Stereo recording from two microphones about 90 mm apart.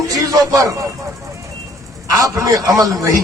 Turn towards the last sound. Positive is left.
turn(degrees=-40)  # may be behind; listen again after turning